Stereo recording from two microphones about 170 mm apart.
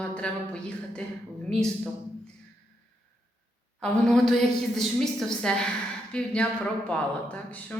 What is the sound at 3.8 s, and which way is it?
A woman's voice, 5° left (ahead or behind).